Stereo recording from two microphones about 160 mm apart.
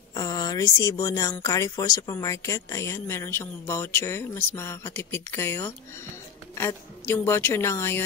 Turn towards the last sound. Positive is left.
turn(degrees=15)  # may be behind; listen again after turning